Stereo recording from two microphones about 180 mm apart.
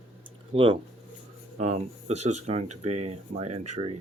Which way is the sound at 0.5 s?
30° right (ahead or behind).